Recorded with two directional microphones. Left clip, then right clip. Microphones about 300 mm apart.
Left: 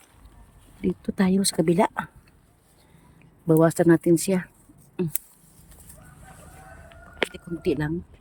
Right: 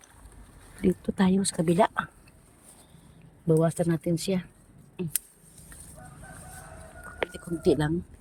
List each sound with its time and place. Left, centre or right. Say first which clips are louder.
0.8 s speech: even; centre
3.4 s speech: left 5 dB; left
3.8 s speech: left 10 dB; centre
7.3 s speech: right 2 dB; centre